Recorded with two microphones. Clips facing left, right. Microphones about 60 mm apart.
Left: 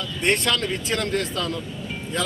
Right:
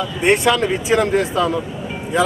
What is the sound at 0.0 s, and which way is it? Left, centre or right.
Speech, centre.